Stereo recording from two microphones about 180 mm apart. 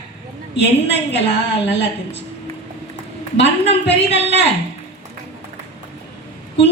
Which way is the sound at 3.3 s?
75° left (ahead or behind).